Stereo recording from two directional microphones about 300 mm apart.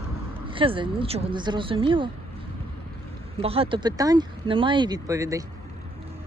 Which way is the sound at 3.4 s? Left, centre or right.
Centre.